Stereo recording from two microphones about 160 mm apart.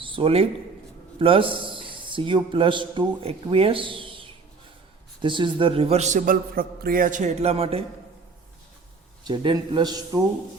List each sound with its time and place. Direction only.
0.0 s a man's voice: 35° right (ahead or behind)
9.2 s a man's voice: 30° right (ahead or behind)